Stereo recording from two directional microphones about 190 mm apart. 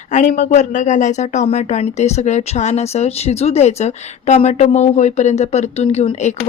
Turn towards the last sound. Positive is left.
turn(degrees=35)  # may be behind; listen again after turning